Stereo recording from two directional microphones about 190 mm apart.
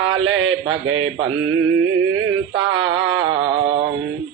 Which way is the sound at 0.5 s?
90° right.